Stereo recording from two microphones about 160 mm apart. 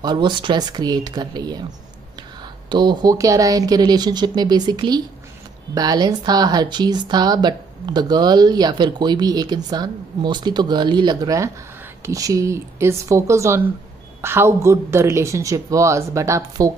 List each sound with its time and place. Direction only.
0.0 s speech: 30° right (ahead or behind)
2.7 s speech: 30° right (ahead or behind)